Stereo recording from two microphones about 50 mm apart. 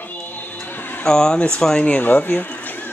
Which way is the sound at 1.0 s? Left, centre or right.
Centre.